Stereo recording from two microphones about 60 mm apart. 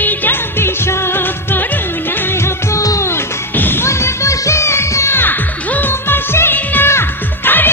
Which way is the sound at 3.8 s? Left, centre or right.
Left.